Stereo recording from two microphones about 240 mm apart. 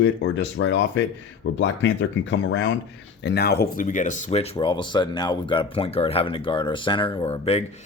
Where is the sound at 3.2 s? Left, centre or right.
Left.